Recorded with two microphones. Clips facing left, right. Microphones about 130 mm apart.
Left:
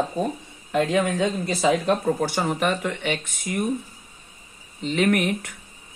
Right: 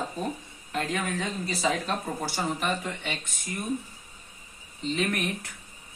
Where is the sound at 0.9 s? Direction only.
80° left.